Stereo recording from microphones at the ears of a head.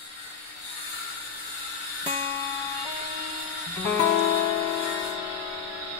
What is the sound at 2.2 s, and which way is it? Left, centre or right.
Music, left.